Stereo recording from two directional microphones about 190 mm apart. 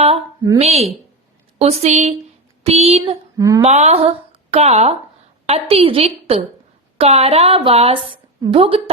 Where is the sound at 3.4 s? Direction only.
20° right (ahead or behind).